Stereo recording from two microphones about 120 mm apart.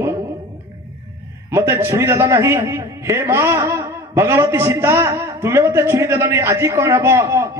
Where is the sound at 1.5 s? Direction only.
20° right (ahead or behind).